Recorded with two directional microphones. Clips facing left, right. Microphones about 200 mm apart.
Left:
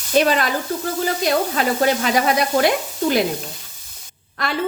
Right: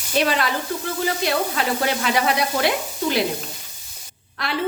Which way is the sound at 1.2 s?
45° left (ahead or behind).